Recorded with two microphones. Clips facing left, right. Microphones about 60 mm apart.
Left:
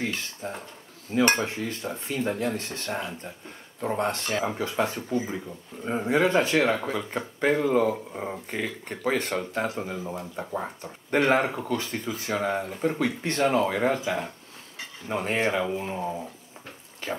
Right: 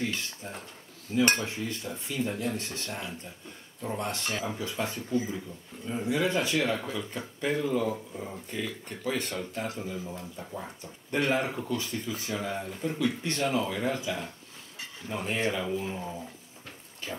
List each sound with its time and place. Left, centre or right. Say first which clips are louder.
0.0 s speech: left 2 dB; left
1.1 s cutlery: left 3 dB; left
5.9 s speech: left 5 dB; left
9.2 s cutlery: left 5 dB; left
9.8 s speech: left 4 dB; left
15.7 s cutlery: left 3 dB; left